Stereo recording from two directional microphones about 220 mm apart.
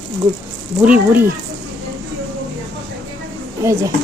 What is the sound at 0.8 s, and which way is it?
Speech, 5° right (ahead or behind).